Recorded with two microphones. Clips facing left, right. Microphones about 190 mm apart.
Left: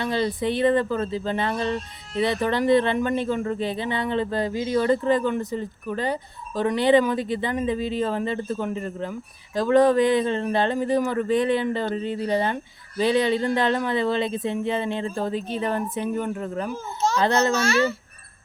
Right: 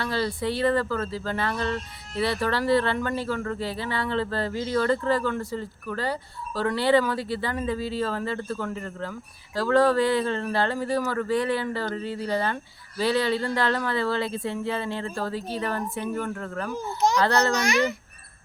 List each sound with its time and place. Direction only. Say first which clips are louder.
0.0 s speech: left 3 dB; 20° left (ahead or behind)
16.7 s a child's voice: right 1 dB; 15° right (ahead or behind)
17.2 s speech: left 3 dB; 20° left (ahead or behind)
17.5 s a child's voice: left 2 dB; 15° right (ahead or behind)